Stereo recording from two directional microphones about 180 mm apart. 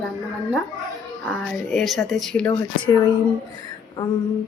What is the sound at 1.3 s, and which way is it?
Speech, centre (ahead or behind).